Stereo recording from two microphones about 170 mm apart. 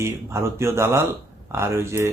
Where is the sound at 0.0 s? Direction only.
15° right (ahead or behind).